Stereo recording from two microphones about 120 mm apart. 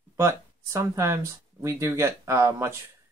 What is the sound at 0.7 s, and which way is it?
Speech, 25° right (ahead or behind).